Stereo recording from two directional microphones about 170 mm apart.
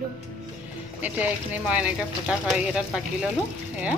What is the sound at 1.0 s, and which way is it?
Speech, 10° right (ahead or behind).